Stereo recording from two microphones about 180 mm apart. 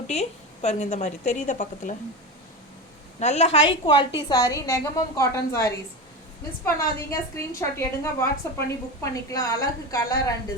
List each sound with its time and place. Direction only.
0.1 s a woman's voice: 35° left (ahead or behind)
3.2 s a woman's voice: 40° left (ahead or behind); by 10.3 s 20° left (ahead or behind)